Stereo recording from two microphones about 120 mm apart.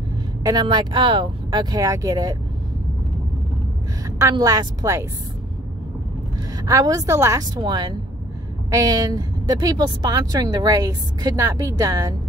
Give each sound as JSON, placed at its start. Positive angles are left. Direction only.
{"t": 0.4, "sound": "a woman's voice", "side_deg": -35}
{"t": 4.2, "sound": "a woman's voice", "side_deg": -30}
{"t": 6.5, "sound": "a woman's voice", "side_deg": -30}
{"t": 7.5, "sound": "a woman's voice", "side_deg": -35}